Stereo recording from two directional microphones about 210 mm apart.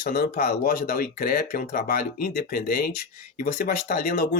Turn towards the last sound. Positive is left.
turn(degrees=45)  # may be behind; listen again after turning